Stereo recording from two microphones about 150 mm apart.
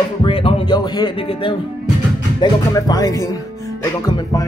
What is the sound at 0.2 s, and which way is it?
Speech, 35° left (ahead or behind).